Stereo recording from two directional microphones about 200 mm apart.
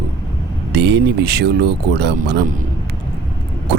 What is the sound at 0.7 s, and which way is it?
Speech, 60° right (ahead or behind).